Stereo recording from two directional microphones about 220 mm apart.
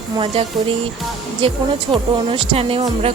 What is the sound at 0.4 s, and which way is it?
Speech, 25° right (ahead or behind).